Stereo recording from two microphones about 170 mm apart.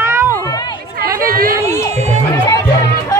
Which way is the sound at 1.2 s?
60° right (ahead or behind).